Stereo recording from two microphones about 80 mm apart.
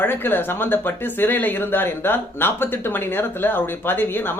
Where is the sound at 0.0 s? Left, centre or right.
Left.